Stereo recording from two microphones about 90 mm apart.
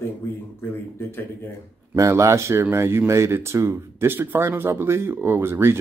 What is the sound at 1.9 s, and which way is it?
Speech, 30° right (ahead or behind).